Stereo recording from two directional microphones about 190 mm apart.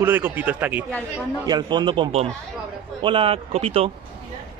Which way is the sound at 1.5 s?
20° right (ahead or behind).